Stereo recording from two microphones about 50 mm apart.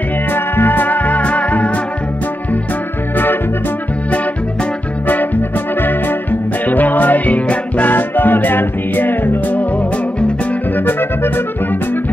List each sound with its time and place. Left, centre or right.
0.3 s music: left
6.7 s music: left
10.9 s music: left